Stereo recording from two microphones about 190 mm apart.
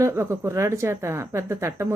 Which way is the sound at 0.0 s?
15° right (ahead or behind).